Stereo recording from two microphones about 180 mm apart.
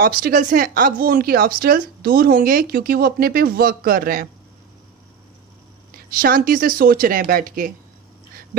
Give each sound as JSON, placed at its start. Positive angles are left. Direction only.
{"t": 0.0, "sound": "speech", "side_deg": -55}
{"t": 6.0, "sound": "speech", "side_deg": -55}